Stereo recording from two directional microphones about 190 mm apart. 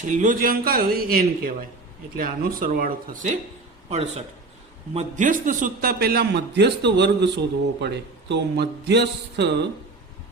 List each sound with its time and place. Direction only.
0.0 s a man's voice: 40° right (ahead or behind); by 9.6 s 60° right (ahead or behind)